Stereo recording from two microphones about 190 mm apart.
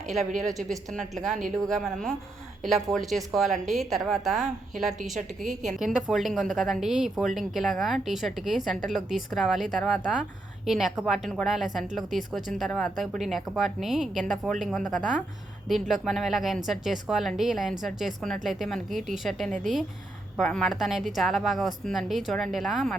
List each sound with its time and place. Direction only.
0.5 s a woman's voice: centre (ahead or behind)
5.5 s a woman's voice: 40° right (ahead or behind)
5.8 s a woman's voice: 5° right (ahead or behind)